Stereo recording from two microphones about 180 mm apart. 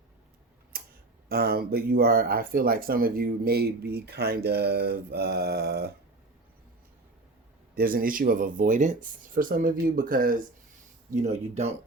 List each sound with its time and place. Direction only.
0.7 s tick-tock: 55° right (ahead or behind)
1.3 s speech: 60° right (ahead or behind)
7.8 s speech: 55° right (ahead or behind)
11.1 s speech: 40° right (ahead or behind)